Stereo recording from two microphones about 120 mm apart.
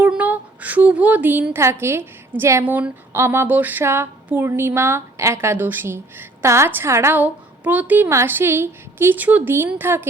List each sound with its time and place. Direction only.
0.0 s a woman's voice: 10° right (ahead or behind)